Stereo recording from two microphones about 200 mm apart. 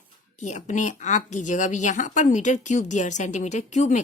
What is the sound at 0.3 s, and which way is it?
A woman's voice, 35° left (ahead or behind).